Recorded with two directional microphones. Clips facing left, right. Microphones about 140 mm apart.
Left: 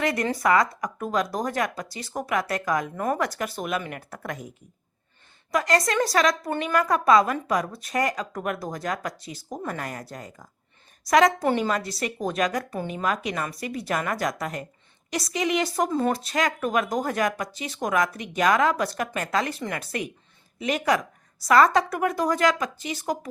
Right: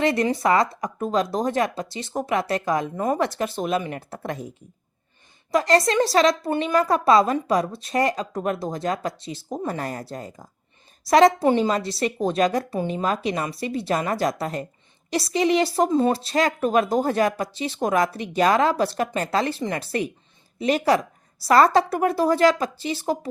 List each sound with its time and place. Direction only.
0.0 s a woman's voice: 25° right (ahead or behind)
5.5 s a woman's voice: 30° right (ahead or behind)